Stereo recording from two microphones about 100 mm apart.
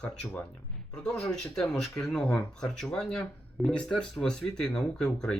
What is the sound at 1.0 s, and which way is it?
Speech, 5° left (ahead or behind).